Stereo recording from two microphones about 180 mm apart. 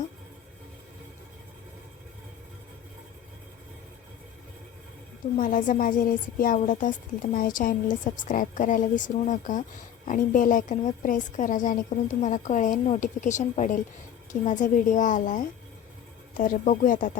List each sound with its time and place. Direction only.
5.4 s a woman's voice: 45° left (ahead or behind)